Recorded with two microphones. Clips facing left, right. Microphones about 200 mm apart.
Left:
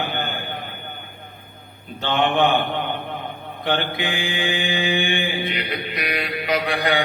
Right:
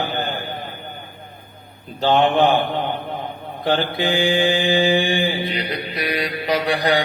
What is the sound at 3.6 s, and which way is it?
Mantra, 35° right (ahead or behind).